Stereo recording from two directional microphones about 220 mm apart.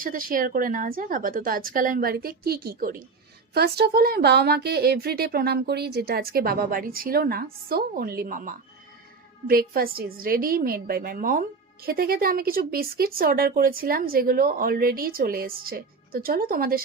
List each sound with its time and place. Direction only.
0.0 s a woman's voice: 40° right (ahead or behind)